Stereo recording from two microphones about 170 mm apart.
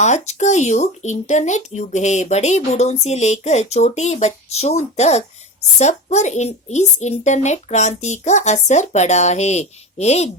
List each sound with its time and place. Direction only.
0.0 s speech: 45° left (ahead or behind)